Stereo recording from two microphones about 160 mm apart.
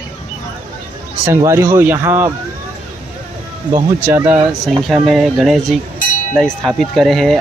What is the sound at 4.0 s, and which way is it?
Speech, 15° right (ahead or behind).